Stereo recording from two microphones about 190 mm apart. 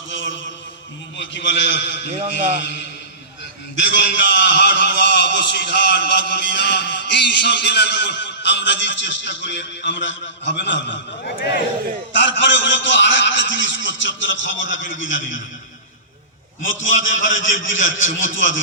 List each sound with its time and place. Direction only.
0.1 s a sound: 75° left (ahead or behind)
1.1 s a man's voice: 70° left (ahead or behind)
12.1 s a man's voice: 75° left (ahead or behind)
16.6 s a man's voice: 90° left